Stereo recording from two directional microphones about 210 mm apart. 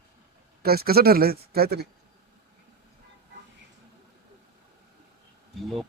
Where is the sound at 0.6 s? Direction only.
45° right (ahead or behind).